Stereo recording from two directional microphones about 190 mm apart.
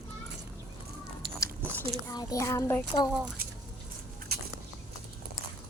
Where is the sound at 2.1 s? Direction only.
20° left (ahead or behind).